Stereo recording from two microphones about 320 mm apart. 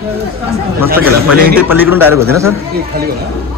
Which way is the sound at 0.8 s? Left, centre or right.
Right.